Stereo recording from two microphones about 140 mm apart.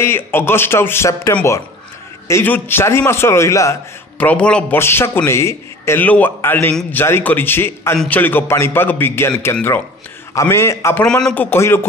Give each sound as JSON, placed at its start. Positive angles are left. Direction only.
{"t": 0.0, "sound": "a man's voice", "side_deg": 15}
{"t": 4.2, "sound": "a man's voice", "side_deg": 10}
{"t": 11.1, "sound": "speech", "side_deg": 5}
{"t": 11.5, "sound": "speech", "side_deg": 15}